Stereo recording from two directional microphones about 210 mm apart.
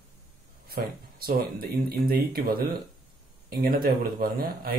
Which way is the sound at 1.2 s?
45° right (ahead or behind).